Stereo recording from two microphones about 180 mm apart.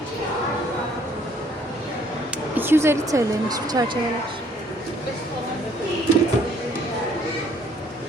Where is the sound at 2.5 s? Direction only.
10° right (ahead or behind).